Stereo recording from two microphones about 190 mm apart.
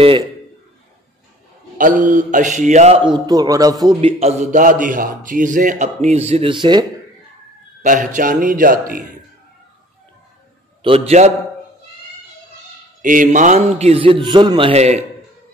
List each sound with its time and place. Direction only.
1.8 s mantra: 45° right (ahead or behind)
3.0 s a man's voice: 20° right (ahead or behind)
4.2 s a man's voice: 35° right (ahead or behind)
7.8 s mantra: 40° right (ahead or behind)
10.8 s a man's voice: 30° right (ahead or behind)
13.0 s a man's voice: 45° right (ahead or behind)